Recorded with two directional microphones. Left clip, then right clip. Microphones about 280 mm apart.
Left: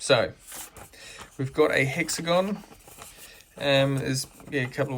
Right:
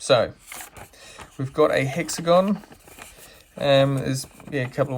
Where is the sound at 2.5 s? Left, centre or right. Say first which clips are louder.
Right 6 dB; right.